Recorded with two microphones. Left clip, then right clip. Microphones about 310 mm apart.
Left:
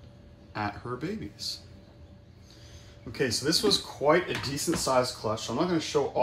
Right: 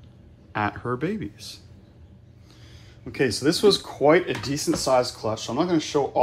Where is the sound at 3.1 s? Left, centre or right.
Centre.